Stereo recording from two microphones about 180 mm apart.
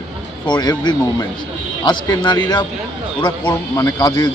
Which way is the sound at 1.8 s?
25° left (ahead or behind).